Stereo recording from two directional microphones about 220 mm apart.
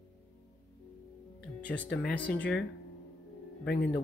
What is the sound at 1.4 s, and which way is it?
Music, 50° left (ahead or behind).